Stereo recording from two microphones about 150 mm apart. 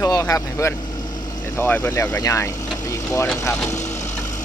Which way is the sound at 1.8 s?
25° left (ahead or behind).